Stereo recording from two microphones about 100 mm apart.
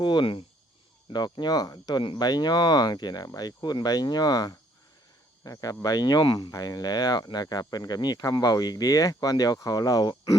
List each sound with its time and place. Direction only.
0.0 s speech: 50° left (ahead or behind)
1.1 s speech: 45° left (ahead or behind)
5.4 s cricket: 35° left (ahead or behind)
5.8 s speech: 40° left (ahead or behind)